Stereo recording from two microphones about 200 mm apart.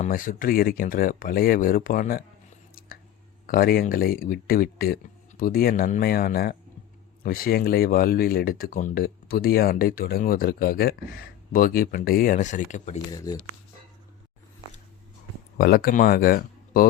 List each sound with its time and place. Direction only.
0.0 s speech: 40° left (ahead or behind)
3.4 s speech: 45° left (ahead or behind)
13.1 s speech: 20° left (ahead or behind)
15.5 s speech: 50° left (ahead or behind)